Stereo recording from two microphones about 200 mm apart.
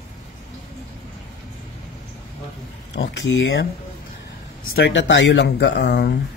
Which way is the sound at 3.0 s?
70° left (ahead or behind).